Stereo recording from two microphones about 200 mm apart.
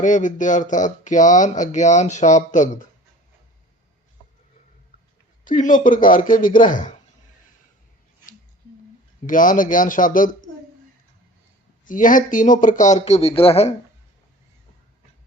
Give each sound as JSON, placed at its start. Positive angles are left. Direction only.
{"t": 0.0, "sound": "speech", "side_deg": 40}
{"t": 5.5, "sound": "speech", "side_deg": 40}
{"t": 9.2, "sound": "speech", "side_deg": 40}
{"t": 11.9, "sound": "speech", "side_deg": 40}